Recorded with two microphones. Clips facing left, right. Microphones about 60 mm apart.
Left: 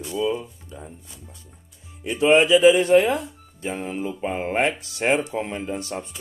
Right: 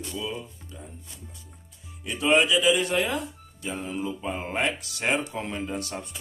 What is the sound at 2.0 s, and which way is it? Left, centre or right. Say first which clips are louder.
Speech: left 5 dB; left.